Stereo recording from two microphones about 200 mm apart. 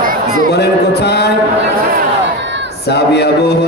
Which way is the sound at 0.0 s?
45° right (ahead or behind).